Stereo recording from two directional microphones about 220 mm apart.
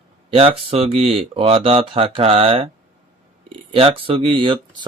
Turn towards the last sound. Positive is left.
turn(degrees=-20)  # may be behind; listen again after turning